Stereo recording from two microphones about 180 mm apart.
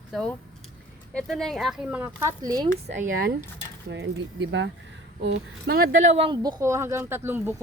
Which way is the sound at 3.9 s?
85° right.